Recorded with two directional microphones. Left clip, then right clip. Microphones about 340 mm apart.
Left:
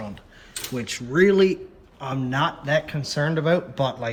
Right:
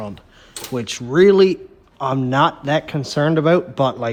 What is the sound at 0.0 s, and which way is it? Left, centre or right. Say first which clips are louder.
Speech: right 6 dB; centre.